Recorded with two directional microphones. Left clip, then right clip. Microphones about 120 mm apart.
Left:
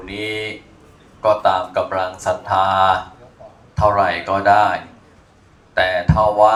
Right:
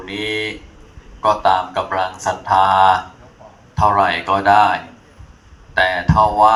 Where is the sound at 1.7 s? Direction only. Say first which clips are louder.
Even; 55° left (ahead or behind).